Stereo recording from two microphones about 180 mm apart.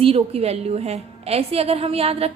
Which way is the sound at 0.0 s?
35° right (ahead or behind).